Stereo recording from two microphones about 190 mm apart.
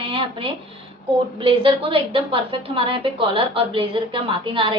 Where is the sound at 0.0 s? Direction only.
30° right (ahead or behind).